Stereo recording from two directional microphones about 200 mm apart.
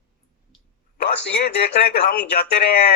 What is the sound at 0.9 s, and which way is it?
A man's voice, 60° left (ahead or behind).